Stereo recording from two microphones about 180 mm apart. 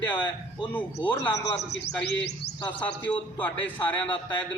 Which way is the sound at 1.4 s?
70° left (ahead or behind).